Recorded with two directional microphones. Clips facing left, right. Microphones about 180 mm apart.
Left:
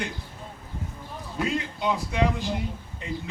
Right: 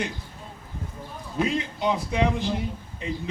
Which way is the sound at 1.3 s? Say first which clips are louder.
Right 3 dB; 20° right (ahead or behind).